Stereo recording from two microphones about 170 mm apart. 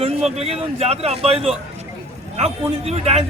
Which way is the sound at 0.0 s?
35° right (ahead or behind).